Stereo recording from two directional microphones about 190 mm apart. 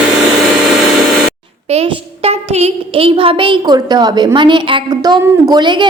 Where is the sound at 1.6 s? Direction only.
30° right (ahead or behind).